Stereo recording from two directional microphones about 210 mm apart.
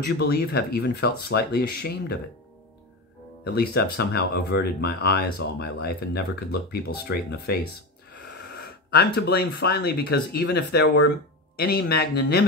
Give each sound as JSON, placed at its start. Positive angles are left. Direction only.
{"t": 0.0, "sound": "speech", "side_deg": 50}
{"t": 3.4, "sound": "speech", "side_deg": 50}
{"t": 9.1, "sound": "speech", "side_deg": 50}